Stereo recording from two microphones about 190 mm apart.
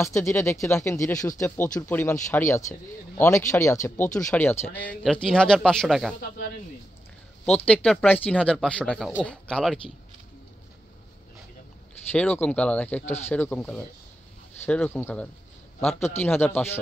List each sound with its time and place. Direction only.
0.0 s speech: 15° left (ahead or behind)
7.4 s speech: 5° left (ahead or behind)
12.1 s speech: 10° left (ahead or behind)
13.0 s speech: 35° left (ahead or behind)
13.3 s speech: 10° left (ahead or behind)